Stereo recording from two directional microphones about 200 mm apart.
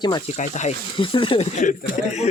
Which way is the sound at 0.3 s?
35° left (ahead or behind).